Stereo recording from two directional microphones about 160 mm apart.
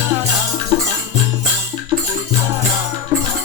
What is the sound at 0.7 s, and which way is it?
Music, 25° right (ahead or behind).